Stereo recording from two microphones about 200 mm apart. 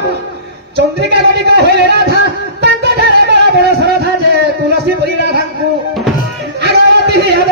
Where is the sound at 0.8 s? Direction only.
55° right (ahead or behind).